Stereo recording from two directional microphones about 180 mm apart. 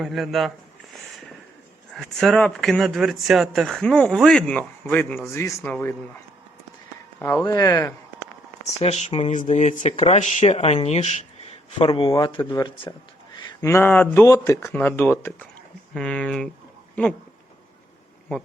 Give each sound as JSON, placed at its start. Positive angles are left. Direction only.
{"t": 0.0, "sound": "speech", "side_deg": 0}
{"t": 1.9, "sound": "speech", "side_deg": 0}
{"t": 7.4, "sound": "speech", "side_deg": 20}
{"t": 8.8, "sound": "speech", "side_deg": 35}
{"t": 11.8, "sound": "speech", "side_deg": 25}
{"t": 13.5, "sound": "speech", "side_deg": 15}